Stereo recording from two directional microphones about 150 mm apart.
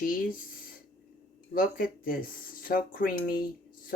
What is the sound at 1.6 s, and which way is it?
Speech, 70° left (ahead or behind).